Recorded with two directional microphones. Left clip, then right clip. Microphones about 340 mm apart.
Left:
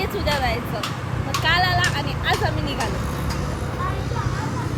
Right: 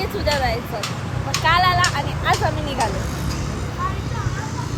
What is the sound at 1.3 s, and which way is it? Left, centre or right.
Speech, centre.